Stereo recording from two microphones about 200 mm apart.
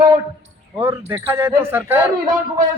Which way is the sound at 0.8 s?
10° right (ahead or behind).